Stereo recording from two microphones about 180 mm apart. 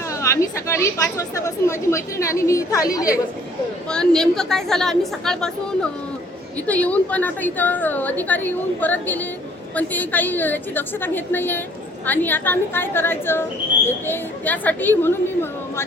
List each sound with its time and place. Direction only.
0.1 s a woman's voice: 15° left (ahead or behind)
3.8 s a woman's voice: 5° left (ahead or behind)
6.7 s speech: 10° left (ahead or behind)